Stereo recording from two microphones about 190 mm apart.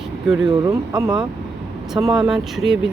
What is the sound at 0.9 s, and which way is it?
Speech, 5° right (ahead or behind).